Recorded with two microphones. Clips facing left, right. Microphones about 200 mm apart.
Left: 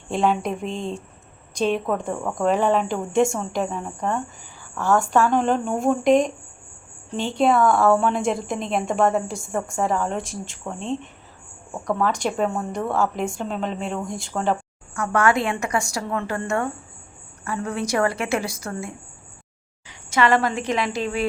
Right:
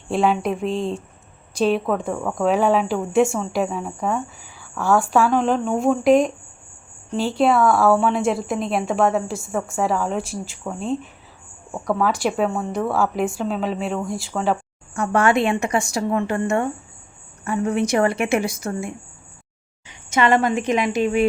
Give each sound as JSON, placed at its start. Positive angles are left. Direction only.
{"t": 0.1, "sound": "speech", "side_deg": -5}
{"t": 14.9, "sound": "a woman's voice", "side_deg": -25}
{"t": 19.9, "sound": "a woman's voice", "side_deg": -20}